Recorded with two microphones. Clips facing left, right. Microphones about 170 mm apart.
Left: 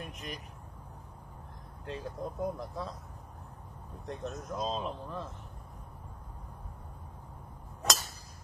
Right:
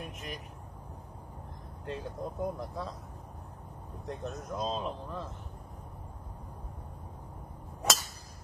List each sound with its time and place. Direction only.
0.0 s speech: centre (ahead or behind)
1.9 s speech: centre (ahead or behind)
4.0 s speech: centre (ahead or behind)